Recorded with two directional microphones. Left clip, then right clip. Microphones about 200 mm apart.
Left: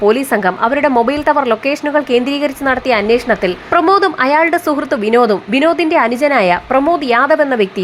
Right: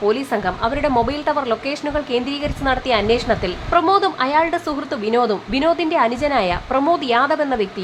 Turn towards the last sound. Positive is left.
turn(degrees=20)  # may be behind; listen again after turning